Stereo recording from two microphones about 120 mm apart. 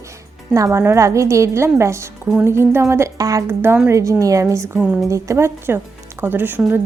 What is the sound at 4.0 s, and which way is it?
A woman's voice, 25° right (ahead or behind).